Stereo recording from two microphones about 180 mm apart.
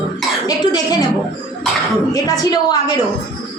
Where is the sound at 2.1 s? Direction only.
20° left (ahead or behind).